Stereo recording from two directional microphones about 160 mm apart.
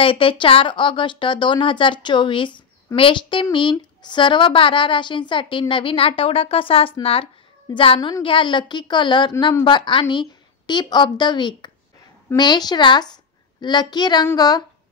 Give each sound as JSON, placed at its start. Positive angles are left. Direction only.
{"t": 0.0, "sound": "a woman's voice", "side_deg": 35}